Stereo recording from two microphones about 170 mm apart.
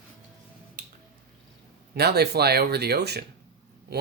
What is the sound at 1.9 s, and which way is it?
Speech, 70° right (ahead or behind).